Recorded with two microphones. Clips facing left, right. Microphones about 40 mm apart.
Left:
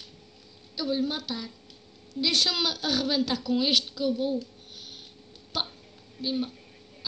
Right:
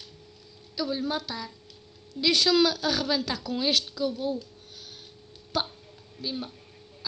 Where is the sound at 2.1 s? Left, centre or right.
Centre.